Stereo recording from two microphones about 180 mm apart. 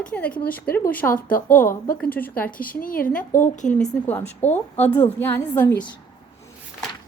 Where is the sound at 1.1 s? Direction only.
50° left (ahead or behind).